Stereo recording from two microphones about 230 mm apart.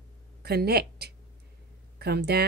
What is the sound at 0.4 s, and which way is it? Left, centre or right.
Speech, right.